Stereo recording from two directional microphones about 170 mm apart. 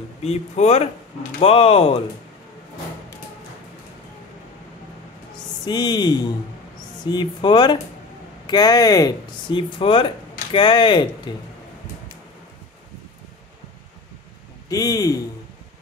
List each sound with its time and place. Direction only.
0.2 s speech: 40° left (ahead or behind)
5.7 s speech: 25° left (ahead or behind)
14.7 s speech: 20° left (ahead or behind)